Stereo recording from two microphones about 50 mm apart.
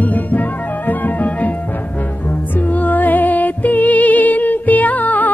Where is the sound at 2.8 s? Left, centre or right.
Left.